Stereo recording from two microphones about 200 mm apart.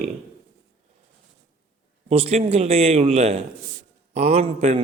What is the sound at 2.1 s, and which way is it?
A man's voice, 30° right (ahead or behind).